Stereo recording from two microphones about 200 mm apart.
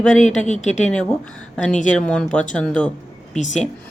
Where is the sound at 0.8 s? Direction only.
5° left (ahead or behind).